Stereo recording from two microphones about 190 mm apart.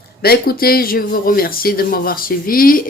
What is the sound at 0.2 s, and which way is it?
Speech, 55° left (ahead or behind).